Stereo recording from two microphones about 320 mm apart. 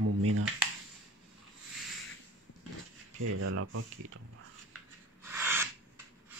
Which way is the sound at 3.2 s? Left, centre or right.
Right.